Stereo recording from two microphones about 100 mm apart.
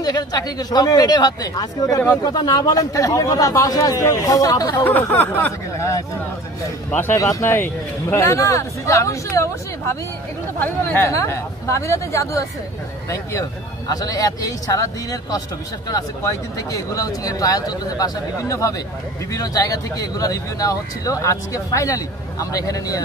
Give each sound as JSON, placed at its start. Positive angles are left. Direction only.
{"t": 0.0, "sound": "speech", "side_deg": 40}
{"t": 4.8, "sound": "a sound", "side_deg": 20}
{"t": 5.8, "sound": "speech", "side_deg": 30}
{"t": 6.9, "sound": "a sound", "side_deg": 20}
{"t": 7.2, "sound": "speech", "side_deg": 35}
{"t": 10.6, "sound": "speech", "side_deg": 20}
{"t": 11.1, "sound": "speech", "side_deg": 30}